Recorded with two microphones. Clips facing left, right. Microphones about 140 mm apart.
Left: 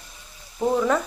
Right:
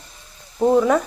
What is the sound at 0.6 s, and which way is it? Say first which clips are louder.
Speech: right 6 dB; 20° right (ahead or behind).